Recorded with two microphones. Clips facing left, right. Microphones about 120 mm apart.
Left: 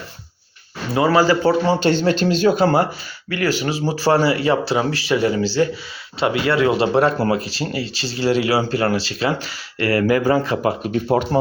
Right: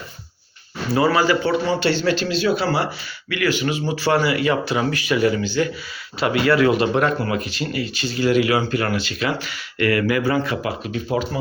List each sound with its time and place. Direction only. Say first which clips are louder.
0.9 s speech: left 2 dB; 25° left (ahead or behind); by 11.3 s 45° left (ahead or behind)